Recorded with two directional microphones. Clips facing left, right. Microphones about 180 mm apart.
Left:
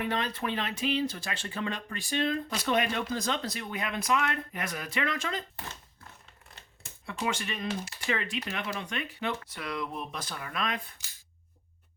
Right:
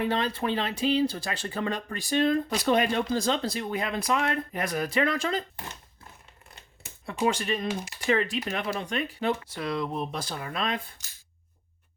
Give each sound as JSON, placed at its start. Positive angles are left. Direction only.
{"t": 0.0, "sound": "speech", "side_deg": -30}
{"t": 7.0, "sound": "speech", "side_deg": -35}